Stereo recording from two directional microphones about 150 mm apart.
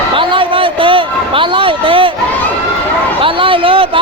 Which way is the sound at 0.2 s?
35° right (ahead or behind).